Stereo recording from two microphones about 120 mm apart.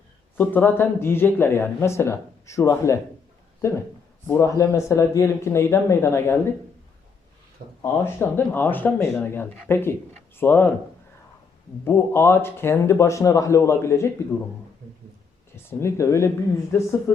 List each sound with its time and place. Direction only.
0.3 s speech: 15° left (ahead or behind)
4.3 s speech: 25° left (ahead or behind)
7.8 s speech: 20° left (ahead or behind)
11.9 s speech: 20° left (ahead or behind)
15.5 s speech: 25° left (ahead or behind)